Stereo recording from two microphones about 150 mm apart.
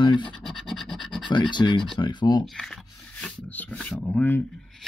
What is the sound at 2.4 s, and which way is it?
Rub, centre (ahead or behind).